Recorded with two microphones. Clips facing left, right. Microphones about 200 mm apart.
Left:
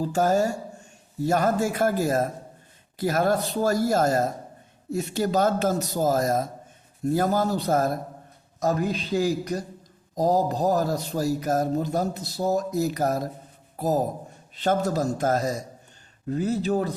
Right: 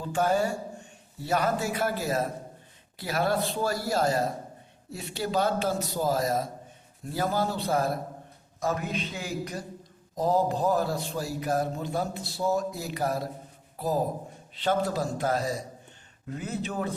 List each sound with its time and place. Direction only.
0.0 s a man's voice: 40° left (ahead or behind)